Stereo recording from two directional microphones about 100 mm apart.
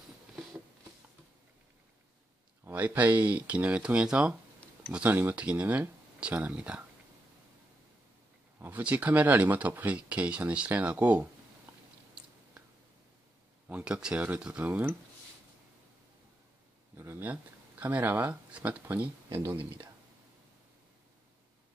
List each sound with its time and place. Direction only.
2.6 s speech: 15° right (ahead or behind)
8.5 s speech: 20° right (ahead or behind)
11.7 s chewing: 15° right (ahead or behind)
13.7 s speech: 10° right (ahead or behind)
16.9 s speech: 25° right (ahead or behind)